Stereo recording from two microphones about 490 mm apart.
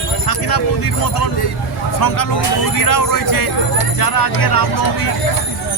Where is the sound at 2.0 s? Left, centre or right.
Left.